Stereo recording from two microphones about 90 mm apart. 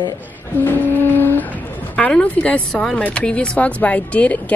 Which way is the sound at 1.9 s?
10° left (ahead or behind).